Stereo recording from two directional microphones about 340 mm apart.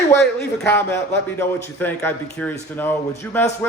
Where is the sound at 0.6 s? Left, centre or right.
Centre.